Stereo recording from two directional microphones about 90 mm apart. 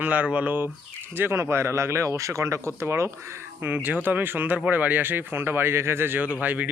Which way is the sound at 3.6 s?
20° right (ahead or behind).